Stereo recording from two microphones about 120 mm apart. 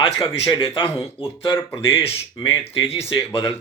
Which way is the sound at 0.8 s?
25° left (ahead or behind).